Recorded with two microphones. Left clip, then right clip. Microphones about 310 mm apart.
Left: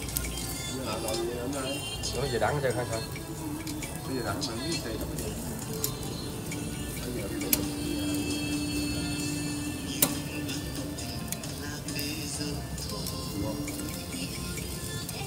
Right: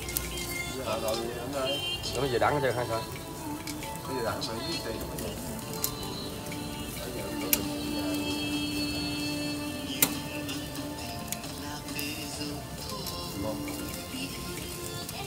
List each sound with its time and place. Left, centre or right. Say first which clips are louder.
2.1 s speech: right 2 dB; centre